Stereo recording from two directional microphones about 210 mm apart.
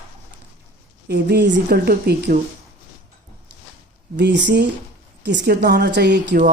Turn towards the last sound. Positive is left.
turn(degrees=-55)  # may be behind; listen again after turning